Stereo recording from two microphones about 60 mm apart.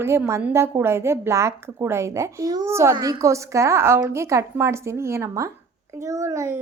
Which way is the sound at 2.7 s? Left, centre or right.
Right.